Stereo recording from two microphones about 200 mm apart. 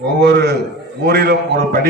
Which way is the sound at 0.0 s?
55° right (ahead or behind).